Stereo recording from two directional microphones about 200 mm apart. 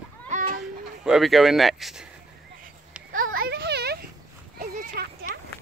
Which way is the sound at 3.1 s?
45° right (ahead or behind).